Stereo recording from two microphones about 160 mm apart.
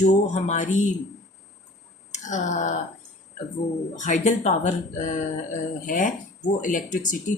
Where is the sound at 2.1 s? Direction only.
50° left (ahead or behind).